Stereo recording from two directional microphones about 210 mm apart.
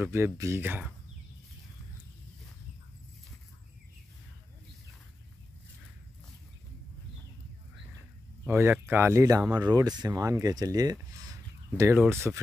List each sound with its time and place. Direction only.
0.0 s speech: 10° right (ahead or behind)
8.5 s speech: 10° right (ahead or behind)